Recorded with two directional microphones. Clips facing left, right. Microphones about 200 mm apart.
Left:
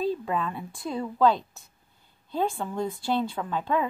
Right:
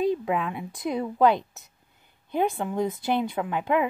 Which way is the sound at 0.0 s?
15° right (ahead or behind).